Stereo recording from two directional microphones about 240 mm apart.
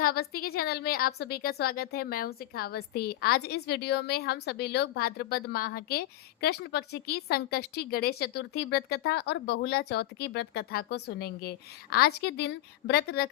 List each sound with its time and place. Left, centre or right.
0.0 s a woman's voice: left